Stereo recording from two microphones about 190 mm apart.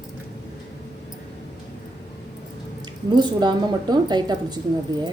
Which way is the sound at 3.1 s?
25° right (ahead or behind).